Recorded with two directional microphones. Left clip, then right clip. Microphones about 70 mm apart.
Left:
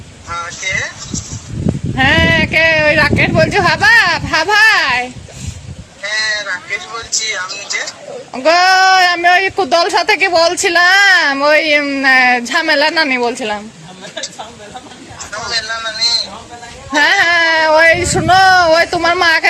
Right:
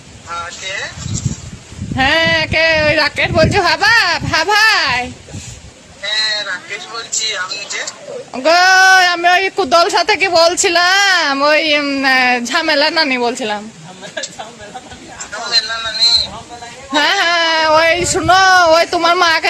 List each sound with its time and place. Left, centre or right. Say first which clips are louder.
0.3 s a sound: left 4 dB; centre
2.0 s speech: left 1 dB; right
6.0 s speech: even; centre
8.3 s speech: even; right
15.3 s a sound: right 2 dB; centre
16.9 s speech: left 2 dB; right